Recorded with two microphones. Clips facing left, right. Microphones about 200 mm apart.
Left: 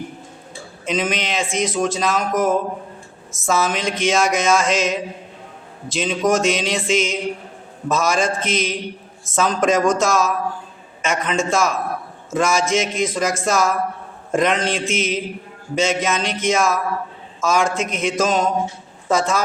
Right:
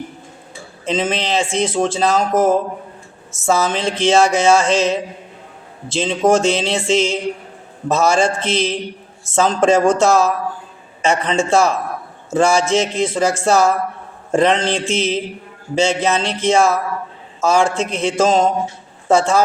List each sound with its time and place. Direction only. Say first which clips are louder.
0.9 s speech: right 3 dB; 30° right (ahead or behind)
3.3 s a sound: right 3 dB; 30° right (ahead or behind)
19.0 s a woman's voice: right 5 dB; 30° right (ahead or behind)